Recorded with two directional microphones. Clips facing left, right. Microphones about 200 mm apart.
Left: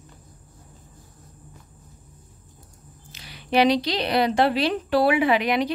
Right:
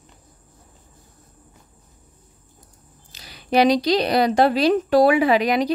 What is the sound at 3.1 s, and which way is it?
A woman's voice, 40° right (ahead or behind).